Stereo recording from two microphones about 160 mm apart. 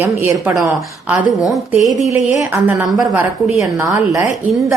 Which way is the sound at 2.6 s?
15° right (ahead or behind).